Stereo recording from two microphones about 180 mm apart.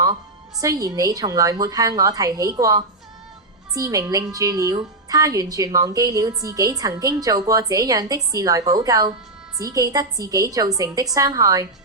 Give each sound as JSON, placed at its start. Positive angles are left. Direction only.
{"t": 0.6, "sound": "a woman's voice", "side_deg": -20}